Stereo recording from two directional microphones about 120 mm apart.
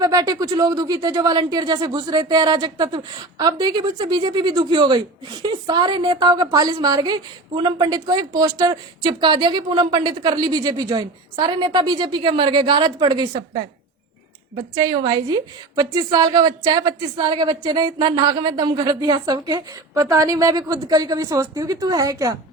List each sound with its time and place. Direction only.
0.0 s speech: 30° right (ahead or behind)
14.5 s a woman's voice: 35° right (ahead or behind)